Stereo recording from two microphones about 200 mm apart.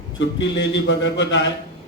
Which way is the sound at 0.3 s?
65° left (ahead or behind).